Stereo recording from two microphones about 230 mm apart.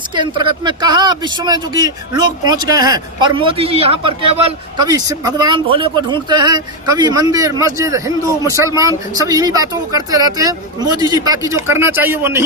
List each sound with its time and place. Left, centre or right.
0.1 s a man's voice: centre